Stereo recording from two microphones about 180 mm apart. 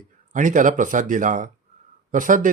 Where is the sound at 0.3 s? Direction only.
45° right (ahead or behind).